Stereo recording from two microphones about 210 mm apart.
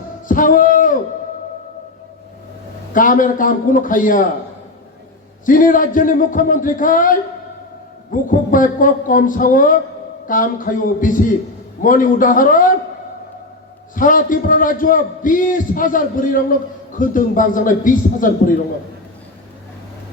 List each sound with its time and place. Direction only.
0.3 s a sound: 40° left (ahead or behind)
2.9 s a man's voice: 40° left (ahead or behind)
5.5 s a man's voice: 40° left (ahead or behind)
13.9 s a man's voice: 40° left (ahead or behind)